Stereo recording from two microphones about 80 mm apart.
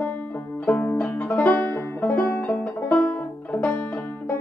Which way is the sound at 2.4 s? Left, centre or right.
Centre.